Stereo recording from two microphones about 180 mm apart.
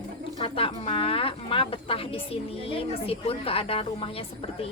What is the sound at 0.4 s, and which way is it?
Speech, 30° left (ahead or behind).